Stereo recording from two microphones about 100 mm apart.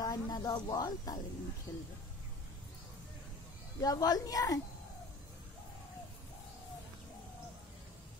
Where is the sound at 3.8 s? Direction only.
35° left (ahead or behind).